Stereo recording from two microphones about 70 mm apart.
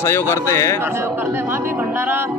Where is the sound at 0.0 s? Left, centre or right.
Left.